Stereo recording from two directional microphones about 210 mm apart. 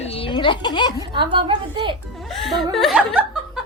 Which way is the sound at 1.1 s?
25° right (ahead or behind).